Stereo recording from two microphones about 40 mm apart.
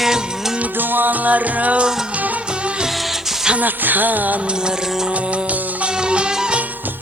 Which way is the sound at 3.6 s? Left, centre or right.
Right.